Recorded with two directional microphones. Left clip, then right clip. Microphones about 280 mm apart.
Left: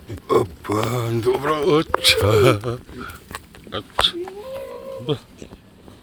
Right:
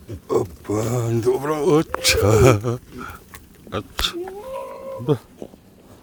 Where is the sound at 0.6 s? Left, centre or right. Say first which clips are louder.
Left 1 dB; centre; by 4.2 s right.